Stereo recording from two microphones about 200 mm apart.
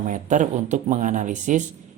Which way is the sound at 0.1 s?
40° right (ahead or behind).